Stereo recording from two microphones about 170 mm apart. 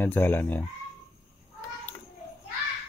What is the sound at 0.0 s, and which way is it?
Cutlery, 10° left (ahead or behind).